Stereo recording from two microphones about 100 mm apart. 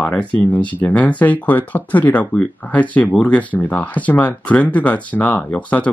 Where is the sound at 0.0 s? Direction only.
15° left (ahead or behind).